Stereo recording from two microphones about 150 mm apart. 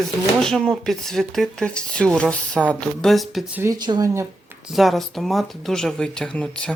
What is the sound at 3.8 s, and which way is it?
Speech, 25° right (ahead or behind).